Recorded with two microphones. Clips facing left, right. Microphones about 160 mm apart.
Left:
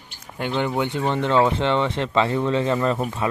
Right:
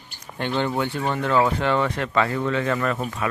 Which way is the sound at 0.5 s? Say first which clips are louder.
Left 1 dB; 15° left (ahead or behind).